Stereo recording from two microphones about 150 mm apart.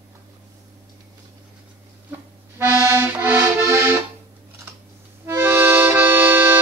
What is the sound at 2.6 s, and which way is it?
Accordion, 15° right (ahead or behind).